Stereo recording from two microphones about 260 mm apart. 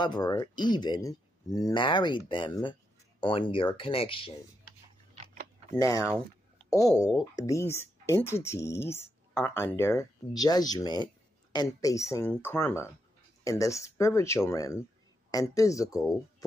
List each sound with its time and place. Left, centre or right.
0.0 s speech: centre
5.1 s a sound: right
5.9 s speech: centre